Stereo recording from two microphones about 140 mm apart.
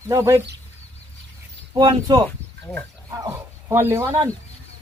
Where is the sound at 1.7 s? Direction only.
25° right (ahead or behind).